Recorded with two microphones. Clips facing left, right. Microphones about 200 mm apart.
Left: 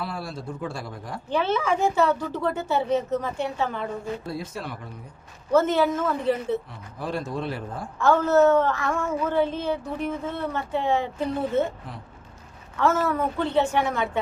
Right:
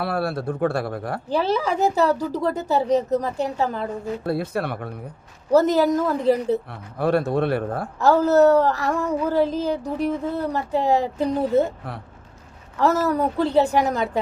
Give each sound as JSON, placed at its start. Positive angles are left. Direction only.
{"t": 0.0, "sound": "speech", "side_deg": -65}
{"t": 1.3, "sound": "a woman's voice", "side_deg": -35}
{"t": 4.3, "sound": "speech", "side_deg": -60}
{"t": 5.5, "sound": "a woman's voice", "side_deg": -40}
{"t": 6.7, "sound": "speech", "side_deg": -65}
{"t": 7.9, "sound": "a woman's voice", "side_deg": -40}
{"t": 12.8, "sound": "a woman's voice", "side_deg": -40}